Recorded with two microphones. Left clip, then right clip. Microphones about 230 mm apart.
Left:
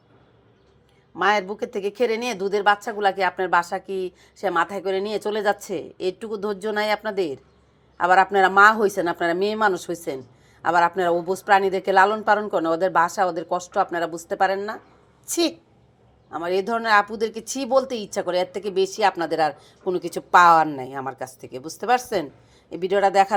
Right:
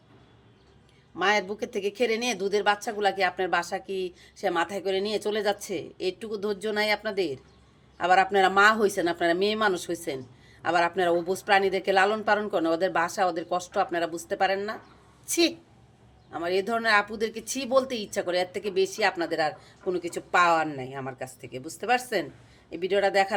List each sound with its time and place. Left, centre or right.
1.2 s a woman's voice: centre